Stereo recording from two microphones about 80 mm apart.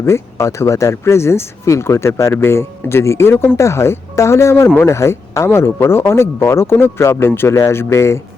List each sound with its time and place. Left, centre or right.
0.0 s speech: left